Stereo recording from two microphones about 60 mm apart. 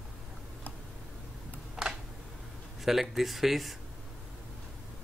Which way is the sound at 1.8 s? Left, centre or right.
Centre.